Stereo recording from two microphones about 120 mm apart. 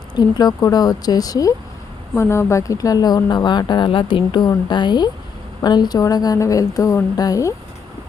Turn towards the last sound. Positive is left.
turn(degrees=30)  # may be behind; listen again after turning